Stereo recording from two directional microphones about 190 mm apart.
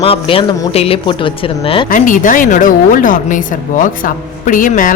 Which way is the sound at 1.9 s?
45° left (ahead or behind).